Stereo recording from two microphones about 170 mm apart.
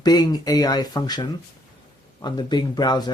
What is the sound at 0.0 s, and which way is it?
Speech, 25° left (ahead or behind).